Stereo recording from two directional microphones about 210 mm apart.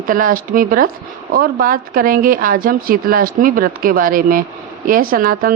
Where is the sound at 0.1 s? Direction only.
40° right (ahead or behind).